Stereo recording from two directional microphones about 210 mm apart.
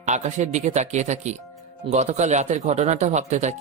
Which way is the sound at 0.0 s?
35° right (ahead or behind).